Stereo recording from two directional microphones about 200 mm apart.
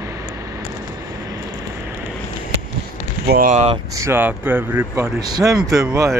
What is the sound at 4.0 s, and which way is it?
Speech, 10° right (ahead or behind).